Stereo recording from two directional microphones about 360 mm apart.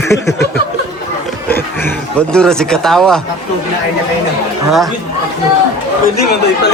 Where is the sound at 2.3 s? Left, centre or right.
Centre.